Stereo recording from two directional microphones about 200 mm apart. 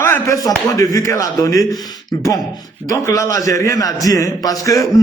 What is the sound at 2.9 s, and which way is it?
A man's voice, 15° left (ahead or behind).